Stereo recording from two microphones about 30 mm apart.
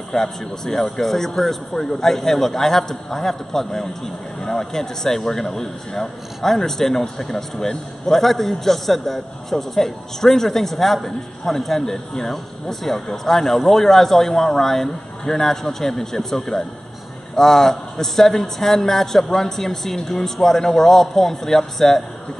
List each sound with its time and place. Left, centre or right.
0.1 s a man's voice: centre